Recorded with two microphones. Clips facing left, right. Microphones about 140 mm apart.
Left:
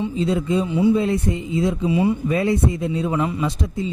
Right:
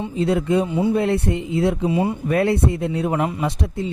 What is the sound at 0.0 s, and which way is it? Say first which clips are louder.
A man's voice: right 1 dB; 60° right (ahead or behind).